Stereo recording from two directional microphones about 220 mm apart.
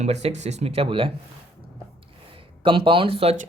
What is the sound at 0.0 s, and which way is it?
Speech, 30° right (ahead or behind).